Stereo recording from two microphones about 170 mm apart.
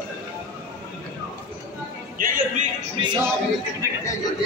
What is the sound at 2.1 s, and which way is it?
Music, 55° right (ahead or behind).